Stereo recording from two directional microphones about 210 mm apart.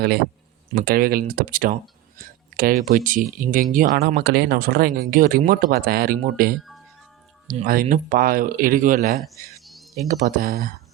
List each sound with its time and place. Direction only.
0.7 s speech: 45° right (ahead or behind)